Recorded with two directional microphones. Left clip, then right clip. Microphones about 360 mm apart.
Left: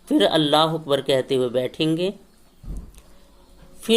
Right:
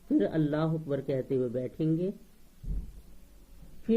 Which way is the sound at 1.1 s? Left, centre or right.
Left.